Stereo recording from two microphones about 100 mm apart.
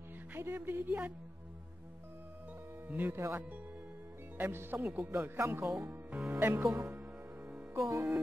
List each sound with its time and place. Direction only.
0.3 s speech: 20° right (ahead or behind)
2.9 s speech: 20° right (ahead or behind)
4.4 s speech: 20° right (ahead or behind)
7.7 s music: 30° right (ahead or behind)